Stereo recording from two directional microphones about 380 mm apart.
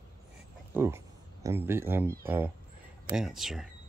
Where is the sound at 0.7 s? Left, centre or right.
Centre.